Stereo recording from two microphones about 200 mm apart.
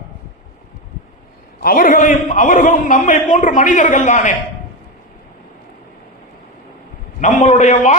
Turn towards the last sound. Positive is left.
turn(degrees=35)  # may be behind; listen again after turning